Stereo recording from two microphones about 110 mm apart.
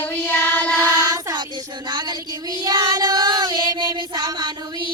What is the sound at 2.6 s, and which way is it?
Female singing, 35° right (ahead or behind).